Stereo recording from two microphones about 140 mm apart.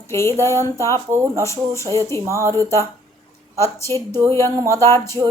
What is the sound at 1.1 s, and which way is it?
Speech, 15° right (ahead or behind).